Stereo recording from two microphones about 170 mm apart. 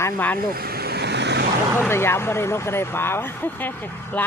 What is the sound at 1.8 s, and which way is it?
Speech, 15° left (ahead or behind).